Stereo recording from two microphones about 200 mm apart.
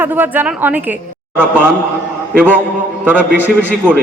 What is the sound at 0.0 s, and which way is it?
Speech, 10° right (ahead or behind).